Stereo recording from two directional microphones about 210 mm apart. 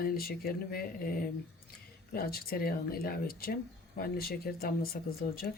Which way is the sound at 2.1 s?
45° left (ahead or behind).